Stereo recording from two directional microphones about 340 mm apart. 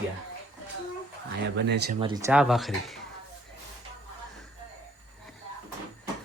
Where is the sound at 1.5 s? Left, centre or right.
Right.